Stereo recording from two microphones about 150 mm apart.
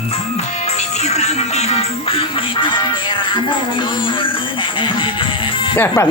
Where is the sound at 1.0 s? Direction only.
45° left (ahead or behind); by 2.9 s 30° left (ahead or behind).